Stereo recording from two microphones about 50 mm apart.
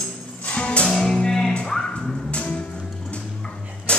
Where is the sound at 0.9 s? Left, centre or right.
Centre.